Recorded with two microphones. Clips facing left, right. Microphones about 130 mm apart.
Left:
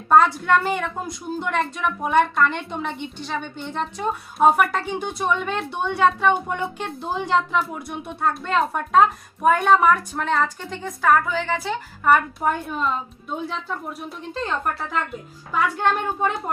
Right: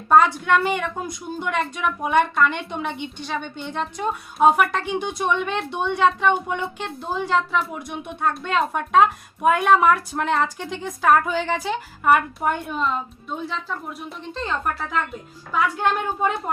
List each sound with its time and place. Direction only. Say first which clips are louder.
0.1 s a woman's voice: even; centre (ahead or behind); by 11.8 s 15° right (ahead or behind)
12.0 s a woman's voice: even; 5° right (ahead or behind)